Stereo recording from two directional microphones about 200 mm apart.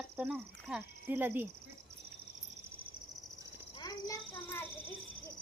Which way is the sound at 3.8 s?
20° left (ahead or behind).